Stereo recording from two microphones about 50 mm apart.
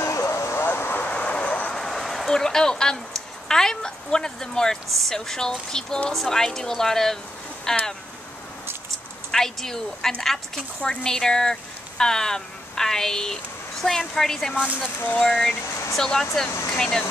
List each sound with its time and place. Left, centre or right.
0.0 s a sound: left
0.7 s vehicle: left
1.0 s vehicle: left
1.7 s a woman's voice: centre
9.3 s a woman's voice: centre
15.0 s speech: left
15.2 s a woman's voice: centre
15.7 s a sound: left
16.0 s a woman's voice: centre